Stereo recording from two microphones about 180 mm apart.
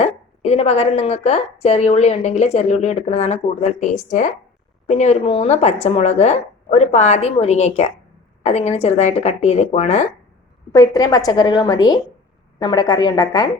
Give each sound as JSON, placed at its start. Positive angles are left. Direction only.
{"t": 0.0, "sound": "a woman's voice", "side_deg": 35}
{"t": 10.7, "sound": "a woman's voice", "side_deg": 20}